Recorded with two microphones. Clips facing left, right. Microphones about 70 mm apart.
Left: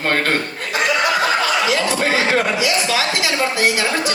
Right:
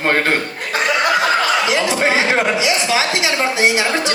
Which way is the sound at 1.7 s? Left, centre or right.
Right.